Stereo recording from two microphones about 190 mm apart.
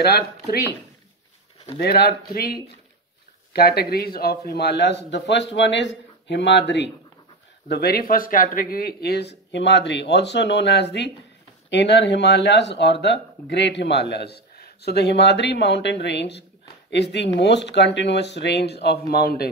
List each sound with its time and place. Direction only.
0.0 s speech: 55° left (ahead or behind)
1.8 s speech: 55° left (ahead or behind)